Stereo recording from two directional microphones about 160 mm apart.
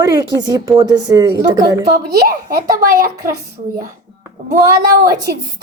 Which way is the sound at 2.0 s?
70° right (ahead or behind).